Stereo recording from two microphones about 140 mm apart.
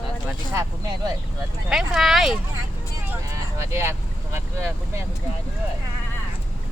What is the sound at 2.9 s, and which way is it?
Vehicle, 20° right (ahead or behind).